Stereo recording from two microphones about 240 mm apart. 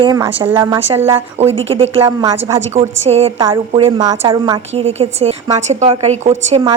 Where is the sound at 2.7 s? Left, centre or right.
Right.